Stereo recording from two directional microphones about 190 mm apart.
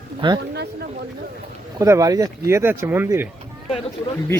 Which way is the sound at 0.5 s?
60° right (ahead or behind).